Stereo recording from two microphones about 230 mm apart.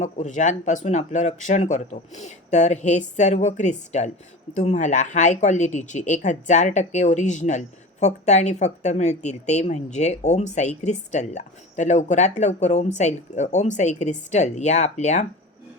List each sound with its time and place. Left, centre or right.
0.0 s a woman's voice: left